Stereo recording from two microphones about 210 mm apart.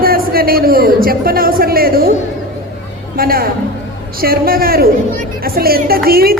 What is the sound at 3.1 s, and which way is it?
A man's voice, 45° right (ahead or behind).